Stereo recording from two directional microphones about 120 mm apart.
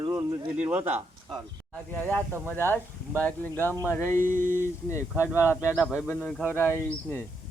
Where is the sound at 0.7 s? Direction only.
15° right (ahead or behind).